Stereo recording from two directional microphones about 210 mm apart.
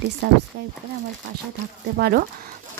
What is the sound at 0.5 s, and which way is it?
Speech, 50° right (ahead or behind).